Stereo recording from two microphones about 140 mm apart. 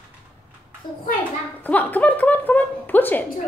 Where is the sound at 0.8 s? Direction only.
30° left (ahead or behind).